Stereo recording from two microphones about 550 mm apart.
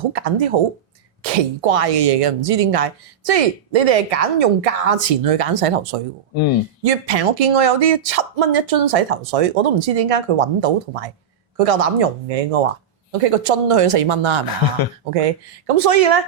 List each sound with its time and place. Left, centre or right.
0.1 s speech: right
6.8 s speech: right
14.4 s speech: left
15.1 s speech: right